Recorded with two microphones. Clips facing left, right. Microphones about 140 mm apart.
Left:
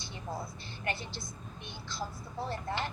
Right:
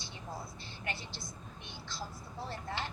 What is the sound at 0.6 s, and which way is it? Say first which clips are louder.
A woman's voice: left 4 dB; 55° left (ahead or behind).